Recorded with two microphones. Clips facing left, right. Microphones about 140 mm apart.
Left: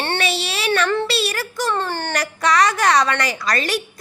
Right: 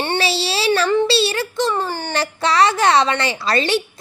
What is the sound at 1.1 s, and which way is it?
Speech, 30° right (ahead or behind).